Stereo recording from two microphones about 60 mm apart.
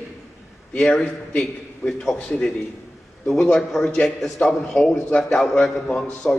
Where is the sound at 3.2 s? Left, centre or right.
Centre.